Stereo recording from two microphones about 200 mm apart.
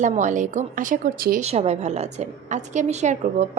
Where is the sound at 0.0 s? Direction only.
40° right (ahead or behind).